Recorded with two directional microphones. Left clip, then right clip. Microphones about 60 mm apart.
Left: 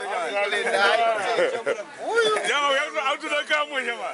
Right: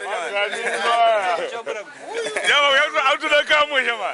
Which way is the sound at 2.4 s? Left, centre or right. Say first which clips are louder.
Right 6 dB; right.